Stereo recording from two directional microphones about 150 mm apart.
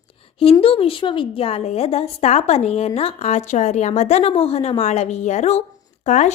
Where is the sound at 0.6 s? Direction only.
40° left (ahead or behind).